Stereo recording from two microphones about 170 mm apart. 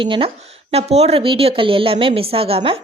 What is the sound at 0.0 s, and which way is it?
Speech, 30° right (ahead or behind).